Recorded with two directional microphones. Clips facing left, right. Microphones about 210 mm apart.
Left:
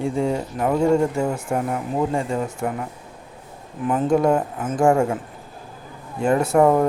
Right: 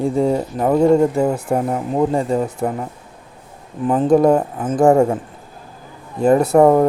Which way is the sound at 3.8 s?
35° right (ahead or behind).